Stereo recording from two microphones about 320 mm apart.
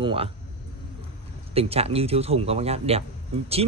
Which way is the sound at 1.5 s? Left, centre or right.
Centre.